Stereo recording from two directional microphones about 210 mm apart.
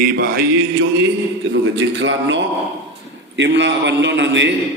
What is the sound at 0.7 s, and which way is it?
A man's voice, 60° right (ahead or behind).